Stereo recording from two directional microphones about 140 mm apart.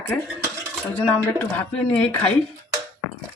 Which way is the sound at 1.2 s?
10° left (ahead or behind).